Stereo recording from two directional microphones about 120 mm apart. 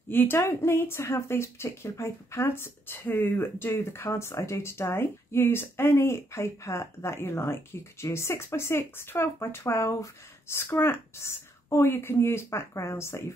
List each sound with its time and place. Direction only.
0.1 s speech: 15° left (ahead or behind)